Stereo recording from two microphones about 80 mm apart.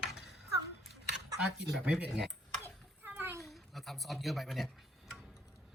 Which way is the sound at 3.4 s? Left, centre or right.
Centre.